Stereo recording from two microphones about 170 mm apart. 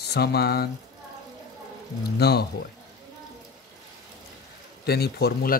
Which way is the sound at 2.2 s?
70° left (ahead or behind).